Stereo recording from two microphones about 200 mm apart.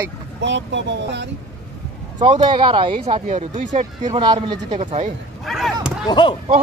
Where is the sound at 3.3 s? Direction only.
35° right (ahead or behind).